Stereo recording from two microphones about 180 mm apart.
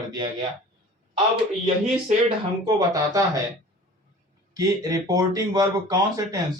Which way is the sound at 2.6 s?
20° right (ahead or behind).